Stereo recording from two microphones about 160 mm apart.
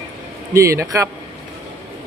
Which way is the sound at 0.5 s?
20° right (ahead or behind).